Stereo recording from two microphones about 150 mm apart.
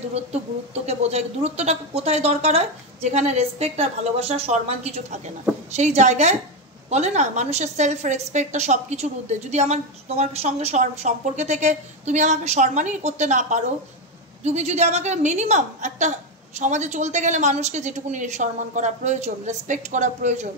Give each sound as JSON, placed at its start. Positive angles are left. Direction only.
{"t": 0.8, "sound": "a woman's voice", "side_deg": -45}